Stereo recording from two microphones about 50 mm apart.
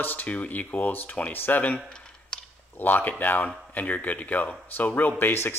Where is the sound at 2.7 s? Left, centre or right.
Left.